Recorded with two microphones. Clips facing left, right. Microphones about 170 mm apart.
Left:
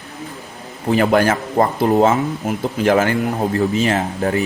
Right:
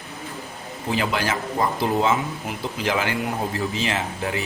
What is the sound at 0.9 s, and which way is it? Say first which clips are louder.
Speech: left 9 dB; 50° left (ahead or behind).